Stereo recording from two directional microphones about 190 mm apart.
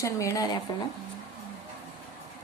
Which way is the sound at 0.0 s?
15° left (ahead or behind).